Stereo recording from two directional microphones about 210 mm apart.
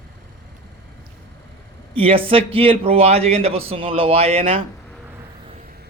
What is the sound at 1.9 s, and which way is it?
A man's voice, 25° right (ahead or behind).